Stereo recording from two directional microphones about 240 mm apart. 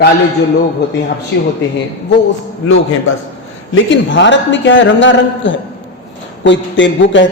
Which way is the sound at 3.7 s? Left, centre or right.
Left.